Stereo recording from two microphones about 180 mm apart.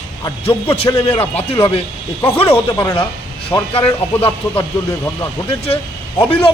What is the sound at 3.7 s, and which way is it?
Speech, 30° left (ahead or behind).